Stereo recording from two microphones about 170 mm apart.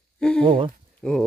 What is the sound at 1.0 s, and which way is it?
Speech, 5° left (ahead or behind).